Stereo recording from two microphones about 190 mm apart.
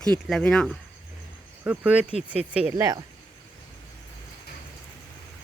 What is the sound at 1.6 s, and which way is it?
Speech, 10° right (ahead or behind).